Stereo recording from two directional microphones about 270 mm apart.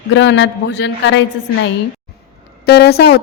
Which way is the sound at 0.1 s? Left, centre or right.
Left.